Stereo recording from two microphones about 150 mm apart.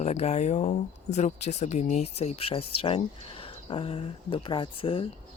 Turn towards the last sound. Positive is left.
turn(degrees=35)  # may be behind; listen again after turning